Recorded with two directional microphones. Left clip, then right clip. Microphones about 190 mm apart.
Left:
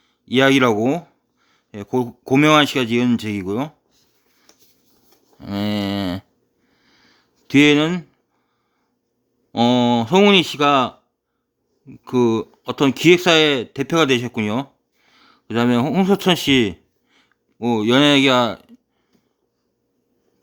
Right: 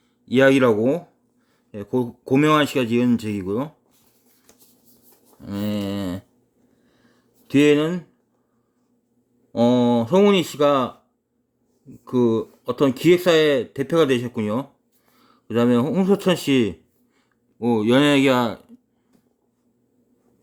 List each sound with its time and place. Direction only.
0.3 s speech: 15° left (ahead or behind)
5.4 s speech: 25° left (ahead or behind)
6.8 s a sound: 30° left (ahead or behind)
9.5 s speech: 25° left (ahead or behind)
12.0 s speech: 20° left (ahead or behind)